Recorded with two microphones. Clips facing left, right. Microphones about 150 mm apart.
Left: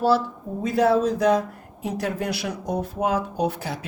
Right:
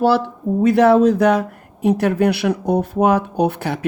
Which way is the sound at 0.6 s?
70° right (ahead or behind).